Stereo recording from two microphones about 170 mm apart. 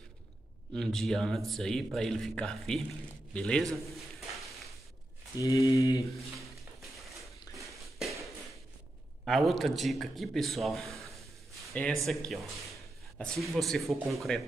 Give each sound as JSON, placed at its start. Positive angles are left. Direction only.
{"t": 0.7, "sound": "speech", "side_deg": 0}
{"t": 5.4, "sound": "speech", "side_deg": 20}
{"t": 9.2, "sound": "speech", "side_deg": 0}